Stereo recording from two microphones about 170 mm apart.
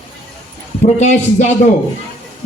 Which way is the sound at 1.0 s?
45° left (ahead or behind).